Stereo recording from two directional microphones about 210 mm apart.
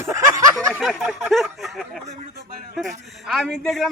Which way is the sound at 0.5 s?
Centre (ahead or behind).